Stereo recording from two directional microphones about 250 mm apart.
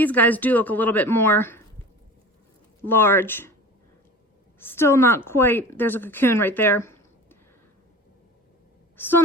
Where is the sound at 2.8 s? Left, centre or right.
Centre.